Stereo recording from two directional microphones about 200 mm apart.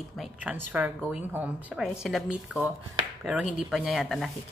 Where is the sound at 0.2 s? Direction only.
5° right (ahead or behind).